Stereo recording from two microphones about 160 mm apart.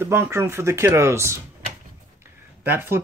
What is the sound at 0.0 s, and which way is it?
Speech, 15° right (ahead or behind).